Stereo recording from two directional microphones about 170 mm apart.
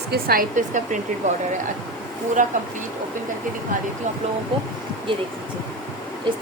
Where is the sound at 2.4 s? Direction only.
50° right (ahead or behind).